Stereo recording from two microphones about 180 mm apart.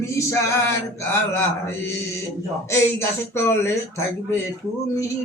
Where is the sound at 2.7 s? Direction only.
15° left (ahead or behind).